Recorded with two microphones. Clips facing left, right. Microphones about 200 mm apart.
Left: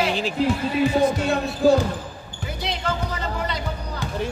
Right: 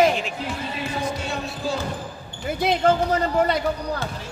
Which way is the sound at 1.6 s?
60° left (ahead or behind).